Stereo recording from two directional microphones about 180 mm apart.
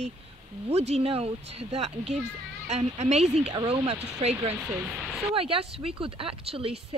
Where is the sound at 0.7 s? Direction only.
35° right (ahead or behind).